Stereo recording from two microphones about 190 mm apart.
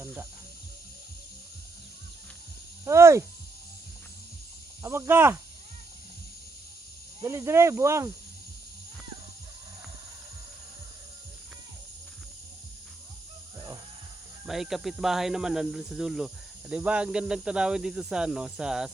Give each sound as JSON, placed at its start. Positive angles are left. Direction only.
{"t": 0.0, "sound": "cricket", "side_deg": -10}
{"t": 2.8, "sound": "speech", "side_deg": -15}
{"t": 4.8, "sound": "speech", "side_deg": -15}
{"t": 7.2, "sound": "speech", "side_deg": -15}
{"t": 14.4, "sound": "speech", "side_deg": 0}